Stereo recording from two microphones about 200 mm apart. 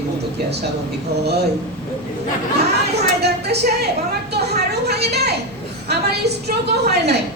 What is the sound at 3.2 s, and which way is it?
Speech, 55° right (ahead or behind).